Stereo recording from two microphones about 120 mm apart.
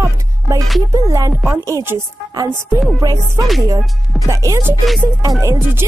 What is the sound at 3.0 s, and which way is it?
Music, 30° right (ahead or behind).